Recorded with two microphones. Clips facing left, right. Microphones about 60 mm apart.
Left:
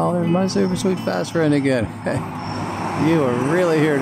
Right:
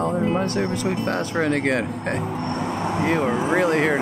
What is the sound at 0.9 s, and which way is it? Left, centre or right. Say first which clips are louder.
Speech: left 3 dB; right.